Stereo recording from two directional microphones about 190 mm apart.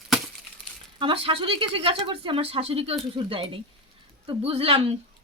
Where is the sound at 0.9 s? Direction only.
30° right (ahead or behind).